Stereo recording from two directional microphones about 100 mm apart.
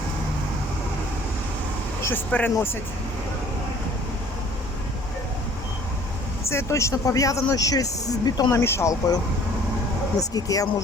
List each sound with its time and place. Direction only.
2.0 s vehicle: 25° left (ahead or behind)
2.3 s speech: 15° left (ahead or behind)
6.5 s speech: 30° left (ahead or behind)
8.6 s speech: 25° left (ahead or behind)
10.2 s speech: 35° left (ahead or behind)